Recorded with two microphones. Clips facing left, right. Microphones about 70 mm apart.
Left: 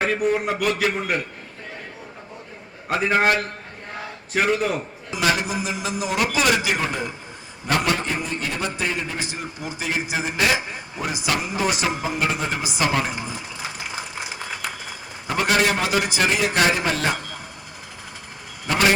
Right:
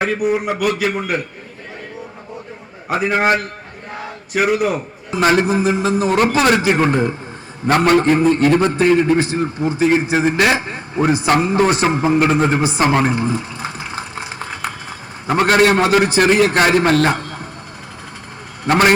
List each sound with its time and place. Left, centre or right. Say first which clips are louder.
0.0 s a man's voice: right 3 dB; centre
2.9 s a man's voice: right 3 dB; centre
4.3 s a man's voice: right 5 dB; centre
5.1 s a man's voice: right 8 dB; right
10.3 s a man's voice: right 3 dB; right
10.7 s a man's voice: right 12 dB; right
17.1 s a sound: right 6 dB; right
18.6 s a man's voice: right 6 dB; right